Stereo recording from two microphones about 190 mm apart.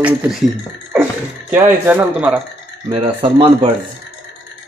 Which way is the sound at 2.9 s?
25° right (ahead or behind).